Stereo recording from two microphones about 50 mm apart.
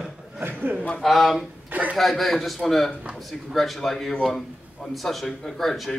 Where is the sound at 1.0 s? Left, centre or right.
Centre.